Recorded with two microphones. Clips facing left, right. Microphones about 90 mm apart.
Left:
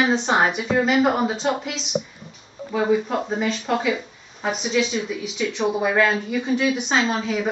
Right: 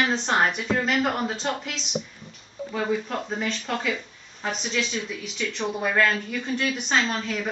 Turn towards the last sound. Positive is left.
turn(degrees=5)  # may be behind; listen again after turning